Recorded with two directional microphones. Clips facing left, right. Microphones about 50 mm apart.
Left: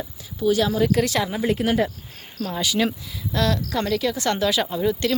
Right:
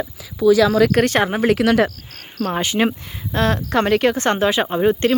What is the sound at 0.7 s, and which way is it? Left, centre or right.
Speech, right.